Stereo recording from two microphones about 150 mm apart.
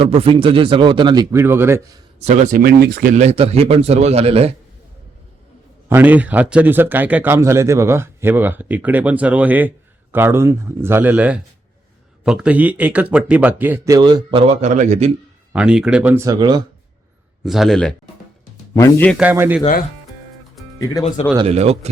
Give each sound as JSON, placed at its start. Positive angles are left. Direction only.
{"t": 0.0, "sound": "speech", "side_deg": -40}
{"t": 1.4, "sound": "a man's voice", "side_deg": -15}
{"t": 2.2, "sound": "speech", "side_deg": -50}
{"t": 2.6, "sound": "speech", "side_deg": -90}
{"t": 5.9, "sound": "a man's voice", "side_deg": -10}
{"t": 15.5, "sound": "a man's voice", "side_deg": -5}
{"t": 16.2, "sound": "speech", "side_deg": -25}
{"t": 17.4, "sound": "a man's voice", "side_deg": 0}
{"t": 18.7, "sound": "speech", "side_deg": 20}
{"t": 19.1, "sound": "a man's voice", "side_deg": -10}
{"t": 21.3, "sound": "speech", "side_deg": -40}